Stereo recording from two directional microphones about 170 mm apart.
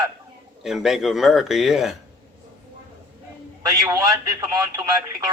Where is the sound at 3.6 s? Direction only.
20° right (ahead or behind).